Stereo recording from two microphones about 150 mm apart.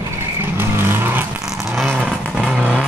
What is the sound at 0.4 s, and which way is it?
Vehicle, 15° right (ahead or behind).